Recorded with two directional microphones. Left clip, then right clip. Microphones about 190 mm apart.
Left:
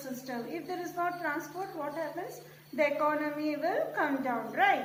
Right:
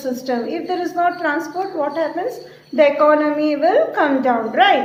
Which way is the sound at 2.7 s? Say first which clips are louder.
Right 16 dB; 50° right (ahead or behind).